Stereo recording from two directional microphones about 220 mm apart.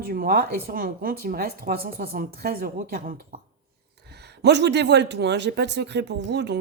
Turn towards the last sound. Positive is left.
turn(degrees=-50)  # may be behind; listen again after turning